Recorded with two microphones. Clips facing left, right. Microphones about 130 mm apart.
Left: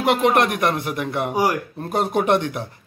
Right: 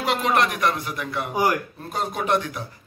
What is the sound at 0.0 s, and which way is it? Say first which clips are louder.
Speech: left 4 dB; 55° left (ahead or behind).